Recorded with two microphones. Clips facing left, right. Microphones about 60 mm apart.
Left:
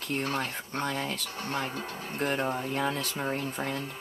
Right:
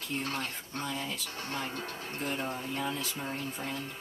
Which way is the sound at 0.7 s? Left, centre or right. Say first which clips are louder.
Left 5 dB; left.